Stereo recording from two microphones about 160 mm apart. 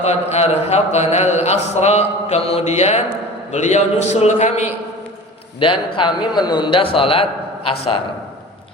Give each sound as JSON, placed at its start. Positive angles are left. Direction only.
{"t": 0.0, "sound": "a man's voice", "side_deg": 45}
{"t": 5.5, "sound": "a man's voice", "side_deg": 35}